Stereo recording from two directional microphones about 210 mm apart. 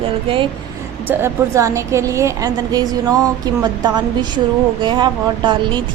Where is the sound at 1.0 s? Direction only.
15° right (ahead or behind).